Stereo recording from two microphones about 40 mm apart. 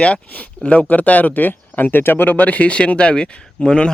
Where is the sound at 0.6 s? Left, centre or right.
Left.